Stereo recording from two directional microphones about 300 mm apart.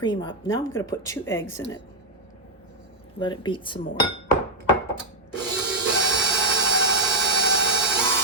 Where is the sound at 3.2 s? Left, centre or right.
Centre.